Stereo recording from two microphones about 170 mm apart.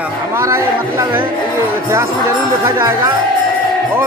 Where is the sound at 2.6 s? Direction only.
20° right (ahead or behind).